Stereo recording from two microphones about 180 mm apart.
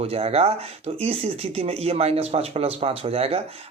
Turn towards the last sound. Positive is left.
turn(degrees=-35)  # may be behind; listen again after turning